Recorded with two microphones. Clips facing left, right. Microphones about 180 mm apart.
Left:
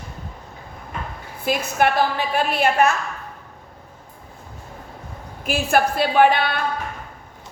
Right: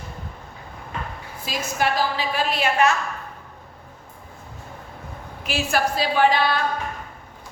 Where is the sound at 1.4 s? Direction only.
60° left (ahead or behind).